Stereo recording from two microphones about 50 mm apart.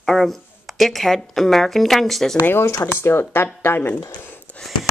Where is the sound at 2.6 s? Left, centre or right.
Left.